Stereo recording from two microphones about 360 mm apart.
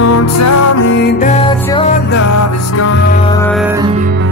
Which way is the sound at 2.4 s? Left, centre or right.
Left.